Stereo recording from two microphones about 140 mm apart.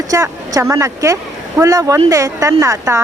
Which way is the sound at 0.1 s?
20° right (ahead or behind).